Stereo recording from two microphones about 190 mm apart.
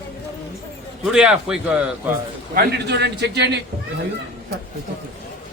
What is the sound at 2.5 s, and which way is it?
A man's voice, 60° right (ahead or behind).